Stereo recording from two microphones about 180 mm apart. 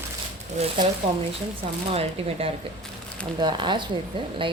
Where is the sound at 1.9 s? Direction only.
35° right (ahead or behind).